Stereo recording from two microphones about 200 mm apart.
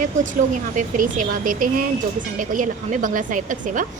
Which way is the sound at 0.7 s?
40° right (ahead or behind).